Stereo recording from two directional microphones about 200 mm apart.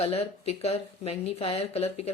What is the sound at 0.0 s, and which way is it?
A woman's voice, 30° left (ahead or behind).